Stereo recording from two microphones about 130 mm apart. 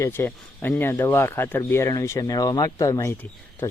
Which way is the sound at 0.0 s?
15° left (ahead or behind).